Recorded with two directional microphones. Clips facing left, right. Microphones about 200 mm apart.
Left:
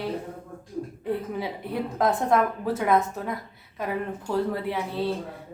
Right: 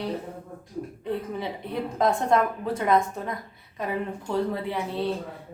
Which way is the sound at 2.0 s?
5° left (ahead or behind).